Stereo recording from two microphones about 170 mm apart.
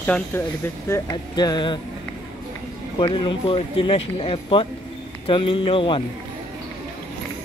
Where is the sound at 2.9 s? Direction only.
30° left (ahead or behind).